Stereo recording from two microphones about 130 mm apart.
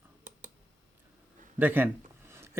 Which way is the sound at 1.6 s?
15° right (ahead or behind).